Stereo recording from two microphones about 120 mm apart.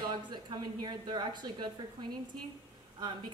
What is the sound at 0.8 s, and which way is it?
Speech, 35° right (ahead or behind).